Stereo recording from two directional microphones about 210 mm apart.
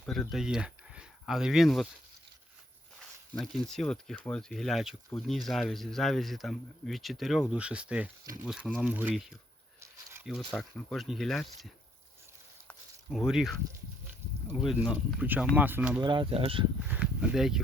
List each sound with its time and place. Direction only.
0.0 s speech: centre (ahead or behind)
3.3 s speech: centre (ahead or behind)
9.8 s a sound: 10° right (ahead or behind)
10.2 s speech: centre (ahead or behind)
12.6 s a sound: centre (ahead or behind)
14.6 s speech: centre (ahead or behind)
16.0 s speech: 20° right (ahead or behind)
16.9 s speech: 5° right (ahead or behind)